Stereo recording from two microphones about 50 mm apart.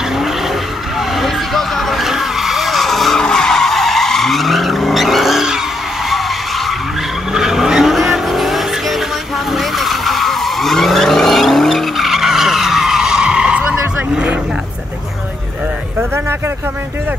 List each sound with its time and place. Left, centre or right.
0.9 s vehicle: centre
3.2 s skidding: centre
7.3 s vehicle: centre
14.1 s a sound: right